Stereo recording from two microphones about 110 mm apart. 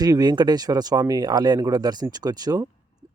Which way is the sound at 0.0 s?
35° right (ahead or behind).